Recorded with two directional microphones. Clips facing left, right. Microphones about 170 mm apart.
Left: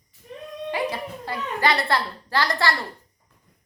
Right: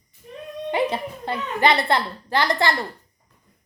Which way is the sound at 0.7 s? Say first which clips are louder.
Right 4 dB; 25° right (ahead or behind).